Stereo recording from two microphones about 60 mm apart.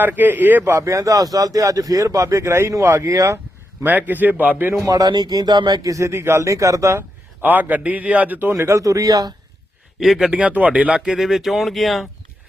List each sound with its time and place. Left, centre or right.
0.0 s a man's voice: right
0.8 s speech: right
3.8 s a man's voice: right
4.9 s speech: right
5.8 s speech: right
7.4 s a man's voice: right
8.5 s speech: right
10.0 s speech: centre
10.3 s a man's voice: right
11.0 s speech: centre